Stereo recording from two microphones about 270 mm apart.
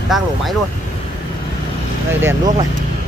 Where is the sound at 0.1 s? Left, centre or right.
Centre.